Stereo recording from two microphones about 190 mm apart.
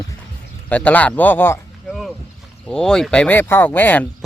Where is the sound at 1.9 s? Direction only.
Centre (ahead or behind).